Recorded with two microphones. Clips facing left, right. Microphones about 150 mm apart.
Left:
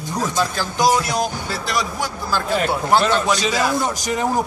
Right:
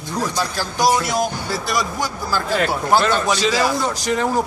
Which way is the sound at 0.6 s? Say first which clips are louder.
Right 1 dB; 5° right (ahead or behind).